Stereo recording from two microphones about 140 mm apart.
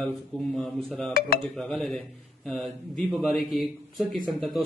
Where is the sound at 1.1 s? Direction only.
90° left.